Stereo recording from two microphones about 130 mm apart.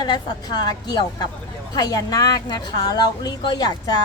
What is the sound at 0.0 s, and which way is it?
A woman's voice, 35° left (ahead or behind).